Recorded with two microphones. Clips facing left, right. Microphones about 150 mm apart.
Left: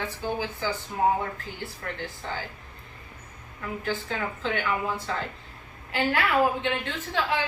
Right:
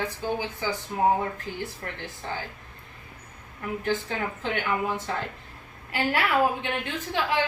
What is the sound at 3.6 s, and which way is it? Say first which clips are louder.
Speech: right 3 dB; 20° right (ahead or behind).